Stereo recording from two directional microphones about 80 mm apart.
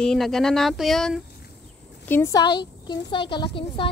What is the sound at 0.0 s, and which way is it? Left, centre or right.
Speech, centre.